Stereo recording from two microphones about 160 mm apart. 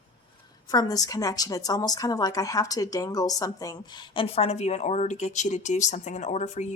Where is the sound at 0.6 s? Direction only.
25° left (ahead or behind).